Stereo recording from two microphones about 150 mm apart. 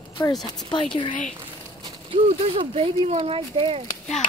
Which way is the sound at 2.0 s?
40° right (ahead or behind).